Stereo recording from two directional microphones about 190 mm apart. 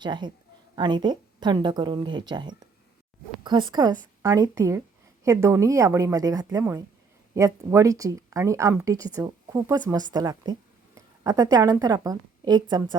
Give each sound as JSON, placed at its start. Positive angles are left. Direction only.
{"t": 0.0, "sound": "a woman's voice", "side_deg": -25}